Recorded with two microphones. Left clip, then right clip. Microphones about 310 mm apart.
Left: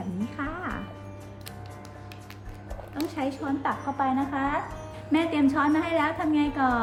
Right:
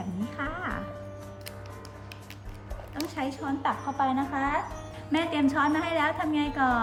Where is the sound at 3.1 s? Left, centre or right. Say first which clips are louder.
Left 1 dB; right.